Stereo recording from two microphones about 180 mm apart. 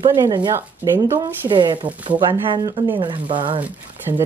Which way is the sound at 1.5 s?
25° right (ahead or behind).